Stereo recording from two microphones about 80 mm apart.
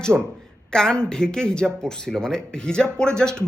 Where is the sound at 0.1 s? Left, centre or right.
Centre.